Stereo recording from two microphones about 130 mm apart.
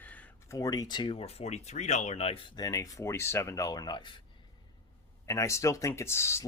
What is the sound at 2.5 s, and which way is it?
Speech, 30° left (ahead or behind).